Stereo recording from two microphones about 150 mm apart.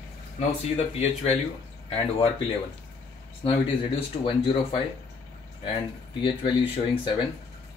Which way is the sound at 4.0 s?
35° left (ahead or behind).